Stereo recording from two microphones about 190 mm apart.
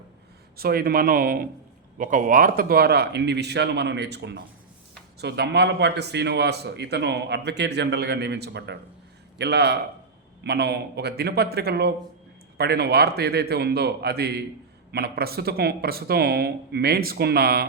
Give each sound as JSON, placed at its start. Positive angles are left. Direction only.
{"t": 0.5, "sound": "a man's voice", "side_deg": -55}